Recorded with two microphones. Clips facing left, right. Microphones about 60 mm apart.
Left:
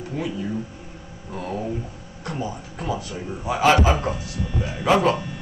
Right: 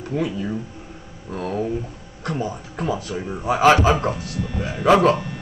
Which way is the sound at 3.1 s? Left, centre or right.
Right.